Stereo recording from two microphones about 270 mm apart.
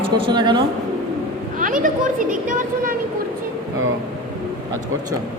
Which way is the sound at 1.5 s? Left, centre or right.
Right.